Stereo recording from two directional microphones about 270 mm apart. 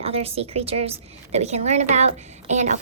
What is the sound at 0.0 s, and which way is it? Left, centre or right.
A woman's voice, right.